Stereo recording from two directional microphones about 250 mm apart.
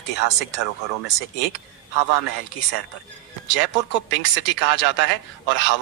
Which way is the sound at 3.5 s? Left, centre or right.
Left.